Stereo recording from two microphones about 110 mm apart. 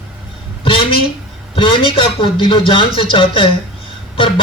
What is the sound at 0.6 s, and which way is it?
A man's voice, 55° left (ahead or behind).